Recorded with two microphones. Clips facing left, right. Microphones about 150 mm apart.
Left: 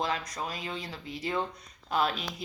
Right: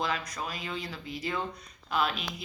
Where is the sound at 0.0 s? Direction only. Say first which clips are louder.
Left 1 dB; 30° left (ahead or behind).